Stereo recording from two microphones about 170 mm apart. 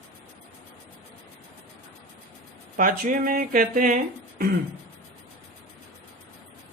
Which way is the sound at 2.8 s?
55° right (ahead or behind).